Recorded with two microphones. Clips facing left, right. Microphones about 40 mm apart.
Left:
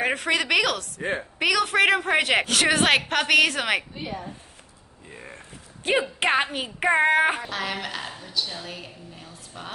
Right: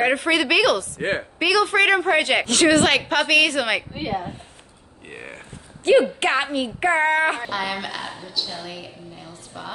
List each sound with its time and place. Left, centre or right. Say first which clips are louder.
0.0 s a woman's voice: right 4 dB; centre
3.9 s a woman's voice: right 7 dB; right
5.1 s burping: right 5 dB; right
6.1 s a woman's voice: right 2 dB; centre
7.4 s a woman's voice: right 3 dB; centre